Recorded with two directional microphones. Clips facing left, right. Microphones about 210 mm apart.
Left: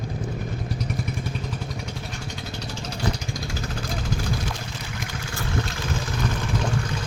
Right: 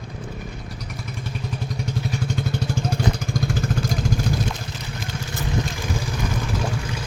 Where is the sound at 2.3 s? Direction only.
50° right (ahead or behind).